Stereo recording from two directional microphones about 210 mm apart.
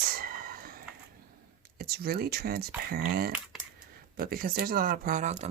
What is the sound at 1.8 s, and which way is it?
Speech, 45° right (ahead or behind).